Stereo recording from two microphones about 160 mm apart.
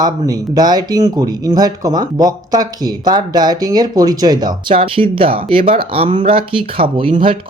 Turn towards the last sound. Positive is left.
turn(degrees=-35)  # may be behind; listen again after turning